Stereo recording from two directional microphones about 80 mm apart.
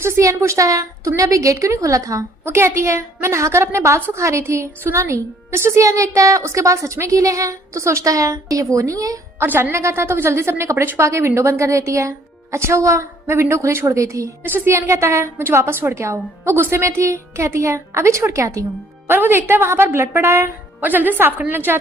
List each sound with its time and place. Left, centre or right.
0.0 s a woman's voice: right
9.4 s a woman's voice: right
14.4 s a woman's voice: right
19.0 s a woman's voice: right